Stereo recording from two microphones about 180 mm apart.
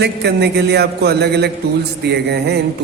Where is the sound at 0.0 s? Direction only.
65° right (ahead or behind).